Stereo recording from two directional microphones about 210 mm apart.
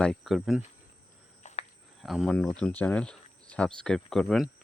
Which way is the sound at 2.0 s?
Centre (ahead or behind).